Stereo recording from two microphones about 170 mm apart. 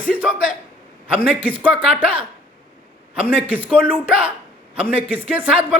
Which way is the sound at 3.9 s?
10° right (ahead or behind).